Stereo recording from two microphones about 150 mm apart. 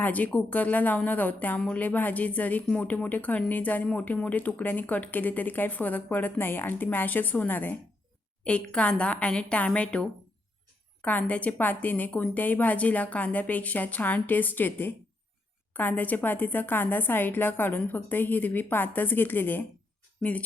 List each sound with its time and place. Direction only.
0.0 s speech: 10° left (ahead or behind)